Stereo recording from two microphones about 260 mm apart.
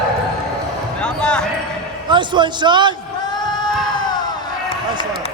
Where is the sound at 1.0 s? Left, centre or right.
Centre.